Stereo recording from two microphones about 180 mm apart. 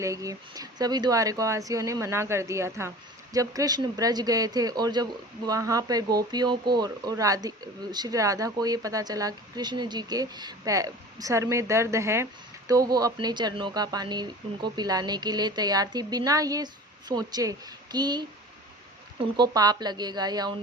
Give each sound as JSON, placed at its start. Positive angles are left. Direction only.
{"t": 0.0, "sound": "speech", "side_deg": -20}
{"t": 19.4, "sound": "speech", "side_deg": -20}